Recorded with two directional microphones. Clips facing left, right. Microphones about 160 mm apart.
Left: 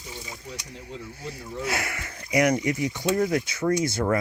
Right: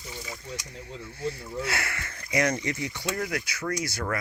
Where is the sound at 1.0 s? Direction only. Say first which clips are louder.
Right 4 dB; 15° left (ahead or behind).